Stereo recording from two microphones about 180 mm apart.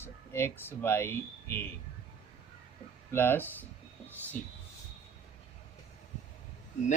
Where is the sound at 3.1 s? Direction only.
10° left (ahead or behind).